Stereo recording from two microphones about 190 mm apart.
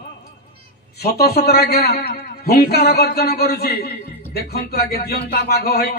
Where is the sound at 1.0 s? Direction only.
55° left (ahead or behind).